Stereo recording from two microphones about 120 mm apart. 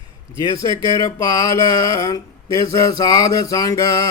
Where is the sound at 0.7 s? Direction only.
30° left (ahead or behind).